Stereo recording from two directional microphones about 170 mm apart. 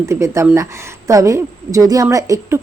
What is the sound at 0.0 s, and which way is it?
A woman's voice, 15° right (ahead or behind).